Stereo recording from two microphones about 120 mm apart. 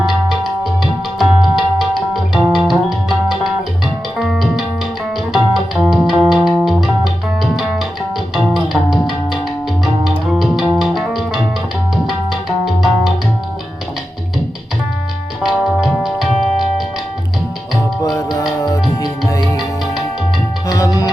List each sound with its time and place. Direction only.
0.0 s tabla: 5° right (ahead or behind)
1.2 s music: 5° right (ahead or behind)
8.4 s music: centre (ahead or behind)
15.6 s music: 5° right (ahead or behind)
20.7 s music: 30° left (ahead or behind)